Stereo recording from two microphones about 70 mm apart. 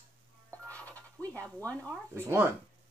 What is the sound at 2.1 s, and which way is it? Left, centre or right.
Speech, right.